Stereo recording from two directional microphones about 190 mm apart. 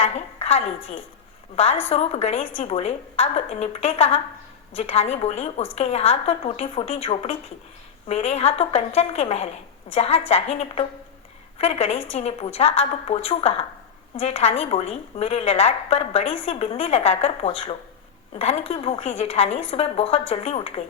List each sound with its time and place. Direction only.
0.0 s a woman's voice: 35° left (ahead or behind)